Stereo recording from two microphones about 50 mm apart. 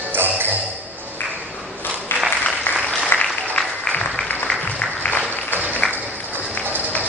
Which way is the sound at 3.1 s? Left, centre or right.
Left.